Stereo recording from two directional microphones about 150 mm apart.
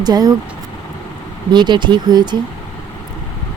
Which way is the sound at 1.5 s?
30° right (ahead or behind).